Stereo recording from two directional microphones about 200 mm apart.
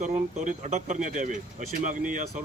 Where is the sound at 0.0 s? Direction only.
40° right (ahead or behind).